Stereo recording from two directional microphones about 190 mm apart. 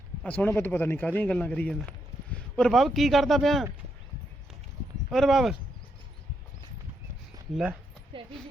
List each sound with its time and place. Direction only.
0.2 s a man's voice: 10° left (ahead or behind)
5.1 s speech: centre (ahead or behind)
7.5 s speech: 5° right (ahead or behind)
8.1 s a sound: 25° right (ahead or behind)